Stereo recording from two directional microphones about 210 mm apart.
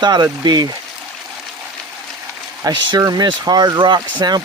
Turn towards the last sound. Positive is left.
turn(degrees=-20)  # may be behind; listen again after turning